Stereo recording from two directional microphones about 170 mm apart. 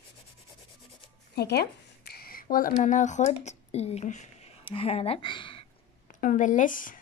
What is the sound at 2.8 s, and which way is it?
Speech, 45° left (ahead or behind).